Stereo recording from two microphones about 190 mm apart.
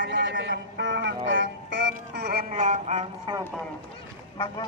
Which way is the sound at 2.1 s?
60° right (ahead or behind).